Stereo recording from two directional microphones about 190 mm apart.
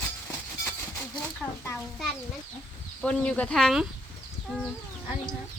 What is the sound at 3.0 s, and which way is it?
Speech, 5° left (ahead or behind).